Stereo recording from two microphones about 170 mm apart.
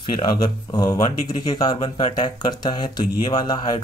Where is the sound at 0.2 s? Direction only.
25° left (ahead or behind).